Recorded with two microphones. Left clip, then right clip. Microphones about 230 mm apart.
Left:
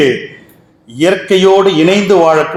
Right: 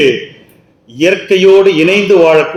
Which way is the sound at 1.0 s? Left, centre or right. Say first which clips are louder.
Right 1 dB; left.